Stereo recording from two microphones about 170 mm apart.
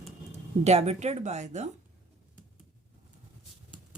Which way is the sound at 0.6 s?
40° right (ahead or behind).